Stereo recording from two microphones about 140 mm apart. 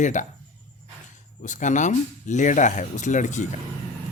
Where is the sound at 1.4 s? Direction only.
60° left (ahead or behind).